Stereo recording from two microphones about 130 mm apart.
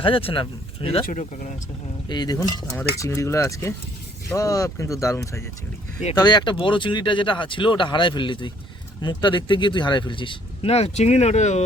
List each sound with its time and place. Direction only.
0.0 s speech: 45° left (ahead or behind)
1.0 s speech: 80° left
2.0 s speech: 30° left (ahead or behind)
6.1 s speech: 35° left (ahead or behind); by 11.6 s 60° left (ahead or behind)